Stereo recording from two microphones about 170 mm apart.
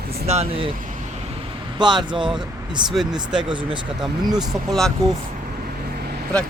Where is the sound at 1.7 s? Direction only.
25° right (ahead or behind).